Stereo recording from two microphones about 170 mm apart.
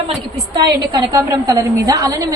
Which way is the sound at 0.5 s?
25° right (ahead or behind).